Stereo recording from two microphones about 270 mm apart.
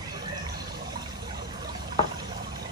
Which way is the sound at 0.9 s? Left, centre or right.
Centre.